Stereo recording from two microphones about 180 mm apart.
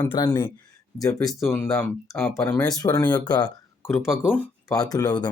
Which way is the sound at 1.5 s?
10° left (ahead or behind).